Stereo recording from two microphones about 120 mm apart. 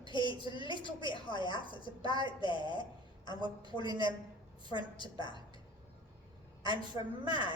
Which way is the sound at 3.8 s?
35° right (ahead or behind).